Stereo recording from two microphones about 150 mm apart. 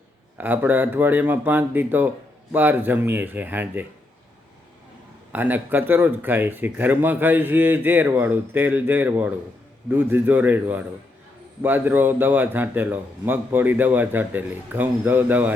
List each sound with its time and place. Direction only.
0.3 s speech: 10° right (ahead or behind)
5.3 s speech: 10° right (ahead or behind)